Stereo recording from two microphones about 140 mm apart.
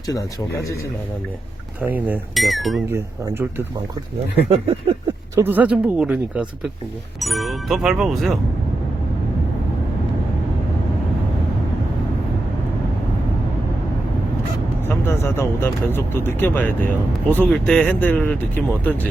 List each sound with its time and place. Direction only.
0.1 s speech: 25° left (ahead or behind)
1.8 s speech: 10° right (ahead or behind)
2.3 s speech: centre (ahead or behind)
2.9 s speech: 15° right (ahead or behind)
4.4 s speech: 45° right (ahead or behind)
5.3 s speech: 15° right (ahead or behind)
14.8 s speech: 15° left (ahead or behind)